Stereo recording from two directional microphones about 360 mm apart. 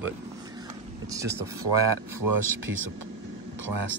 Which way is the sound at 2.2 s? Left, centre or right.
Right.